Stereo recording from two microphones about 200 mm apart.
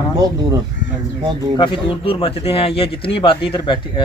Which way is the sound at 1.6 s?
25° left (ahead or behind).